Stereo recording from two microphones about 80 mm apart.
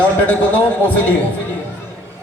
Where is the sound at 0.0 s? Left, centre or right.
Centre.